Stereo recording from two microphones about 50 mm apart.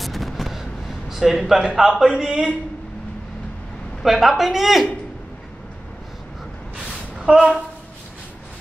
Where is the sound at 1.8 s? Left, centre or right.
Centre.